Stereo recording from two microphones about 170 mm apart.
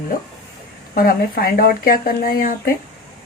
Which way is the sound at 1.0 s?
60° left (ahead or behind).